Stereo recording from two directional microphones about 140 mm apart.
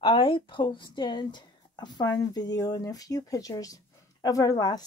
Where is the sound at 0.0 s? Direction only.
40° left (ahead or behind).